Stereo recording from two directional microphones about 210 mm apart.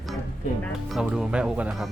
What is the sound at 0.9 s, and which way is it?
Speech, 5° right (ahead or behind).